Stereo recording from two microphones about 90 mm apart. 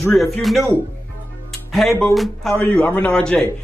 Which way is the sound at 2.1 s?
Centre (ahead or behind).